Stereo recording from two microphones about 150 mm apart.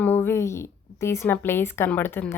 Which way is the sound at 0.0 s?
15° left (ahead or behind).